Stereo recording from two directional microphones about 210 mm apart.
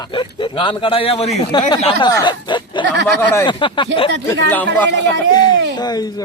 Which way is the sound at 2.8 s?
55° right (ahead or behind).